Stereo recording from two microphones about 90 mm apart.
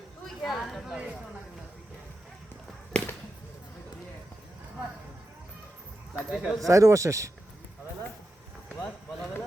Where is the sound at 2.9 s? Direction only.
20° left (ahead or behind).